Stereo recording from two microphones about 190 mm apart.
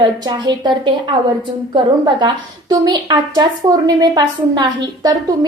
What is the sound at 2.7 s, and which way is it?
A woman's voice, 20° right (ahead or behind).